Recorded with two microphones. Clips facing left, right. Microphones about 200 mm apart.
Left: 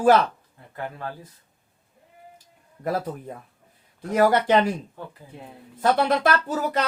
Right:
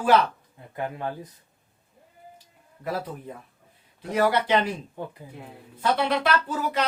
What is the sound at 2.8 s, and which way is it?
Speech, 45° left (ahead or behind).